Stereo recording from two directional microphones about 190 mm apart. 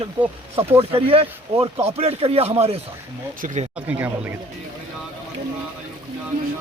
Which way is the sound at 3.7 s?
10° right (ahead or behind).